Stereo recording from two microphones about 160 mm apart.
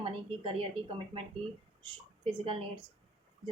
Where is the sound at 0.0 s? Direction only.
35° right (ahead or behind).